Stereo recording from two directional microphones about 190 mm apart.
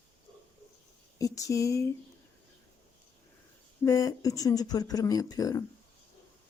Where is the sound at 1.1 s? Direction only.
15° left (ahead or behind).